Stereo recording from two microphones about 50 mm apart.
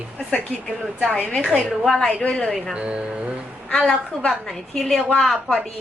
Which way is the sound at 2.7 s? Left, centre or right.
Right.